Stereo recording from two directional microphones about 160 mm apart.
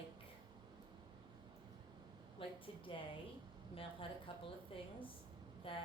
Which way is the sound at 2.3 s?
35° left (ahead or behind).